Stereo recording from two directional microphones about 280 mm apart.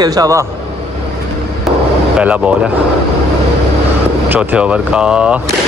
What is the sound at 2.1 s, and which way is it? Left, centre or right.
Speech, centre.